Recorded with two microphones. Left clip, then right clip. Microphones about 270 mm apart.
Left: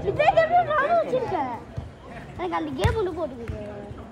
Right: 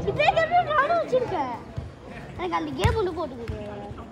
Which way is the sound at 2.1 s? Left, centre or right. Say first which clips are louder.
Even; centre.